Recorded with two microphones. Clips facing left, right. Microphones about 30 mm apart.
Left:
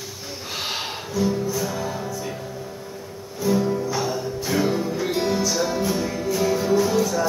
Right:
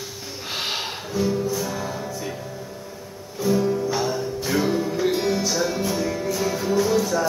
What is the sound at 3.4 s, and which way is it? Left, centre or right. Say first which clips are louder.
Music: right 1 dB; centre.